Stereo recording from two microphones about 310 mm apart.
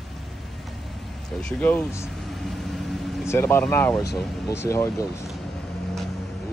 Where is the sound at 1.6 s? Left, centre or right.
Centre.